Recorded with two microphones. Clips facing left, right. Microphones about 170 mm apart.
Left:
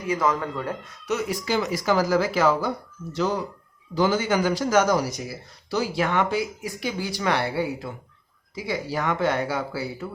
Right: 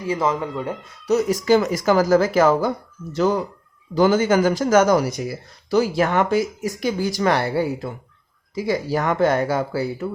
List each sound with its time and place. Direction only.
0.0 s speech: 25° right (ahead or behind)
1.0 s speech: 40° right (ahead or behind)
8.5 s speech: 45° right (ahead or behind)